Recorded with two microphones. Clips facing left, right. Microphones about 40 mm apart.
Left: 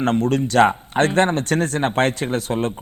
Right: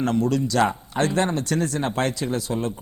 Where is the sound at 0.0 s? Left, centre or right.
Left.